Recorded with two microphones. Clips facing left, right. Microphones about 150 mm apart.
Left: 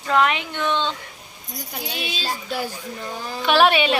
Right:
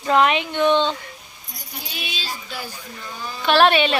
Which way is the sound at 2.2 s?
55° left (ahead or behind).